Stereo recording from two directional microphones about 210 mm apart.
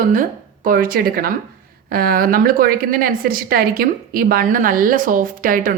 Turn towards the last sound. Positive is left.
turn(degrees=-40)  # may be behind; listen again after turning